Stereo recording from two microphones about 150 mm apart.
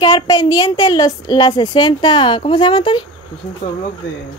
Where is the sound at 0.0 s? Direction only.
25° left (ahead or behind).